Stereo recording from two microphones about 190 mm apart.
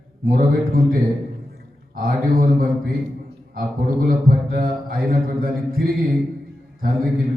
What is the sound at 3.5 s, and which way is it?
Speech, 50° right (ahead or behind).